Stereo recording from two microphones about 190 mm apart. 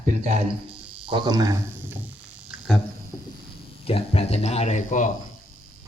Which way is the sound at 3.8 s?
30° left (ahead or behind).